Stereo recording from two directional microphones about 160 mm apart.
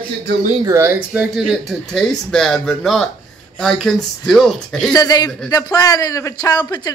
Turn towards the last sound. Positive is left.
turn(degrees=25)  # may be behind; listen again after turning